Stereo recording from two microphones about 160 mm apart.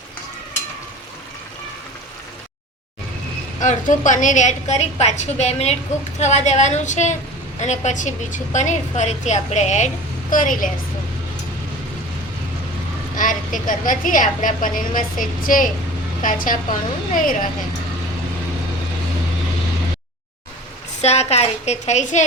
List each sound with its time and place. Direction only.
3.6 s a woman's voice: 50° left (ahead or behind)
13.1 s a woman's voice: 55° left (ahead or behind)
21.0 s a woman's voice: 40° left (ahead or behind)